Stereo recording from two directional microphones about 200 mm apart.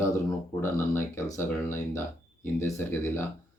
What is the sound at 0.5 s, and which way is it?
Speech, 15° left (ahead or behind).